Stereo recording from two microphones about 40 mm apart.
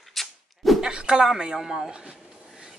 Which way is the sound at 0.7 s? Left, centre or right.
Centre.